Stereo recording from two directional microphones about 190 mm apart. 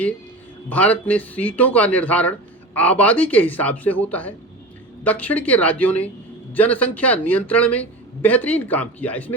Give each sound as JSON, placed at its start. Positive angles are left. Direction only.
{"t": 0.7, "sound": "speech", "side_deg": 10}